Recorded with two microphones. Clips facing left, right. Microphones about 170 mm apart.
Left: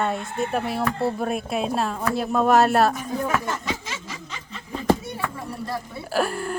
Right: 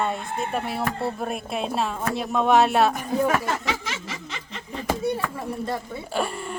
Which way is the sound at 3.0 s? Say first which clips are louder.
Right 3 dB; 70° right (ahead or behind).